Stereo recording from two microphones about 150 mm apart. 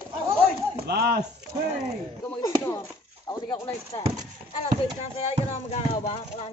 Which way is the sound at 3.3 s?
30° left (ahead or behind).